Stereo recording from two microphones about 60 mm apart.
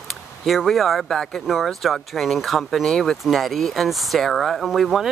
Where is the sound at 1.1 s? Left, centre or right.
Centre.